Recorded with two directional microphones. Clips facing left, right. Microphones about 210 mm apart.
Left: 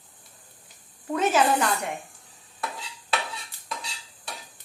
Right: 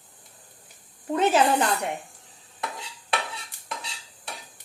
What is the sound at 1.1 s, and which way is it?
Speech, 30° right (ahead or behind).